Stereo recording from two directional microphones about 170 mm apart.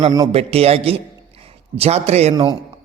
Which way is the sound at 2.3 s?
25° right (ahead or behind).